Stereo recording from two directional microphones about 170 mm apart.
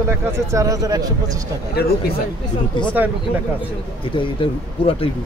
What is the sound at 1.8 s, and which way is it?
Speech, 70° left (ahead or behind).